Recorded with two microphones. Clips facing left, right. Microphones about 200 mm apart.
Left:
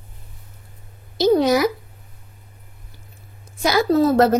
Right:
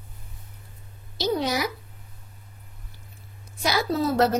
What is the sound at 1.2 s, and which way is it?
Speech, 45° left (ahead or behind).